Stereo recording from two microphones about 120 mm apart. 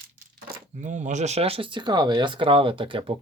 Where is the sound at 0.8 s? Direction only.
90° right; by 3.1 s 50° right (ahead or behind).